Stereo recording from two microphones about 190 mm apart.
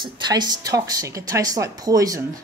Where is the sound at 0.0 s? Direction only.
20° right (ahead or behind).